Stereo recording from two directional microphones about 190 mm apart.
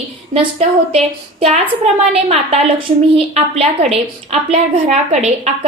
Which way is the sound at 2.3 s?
30° right (ahead or behind).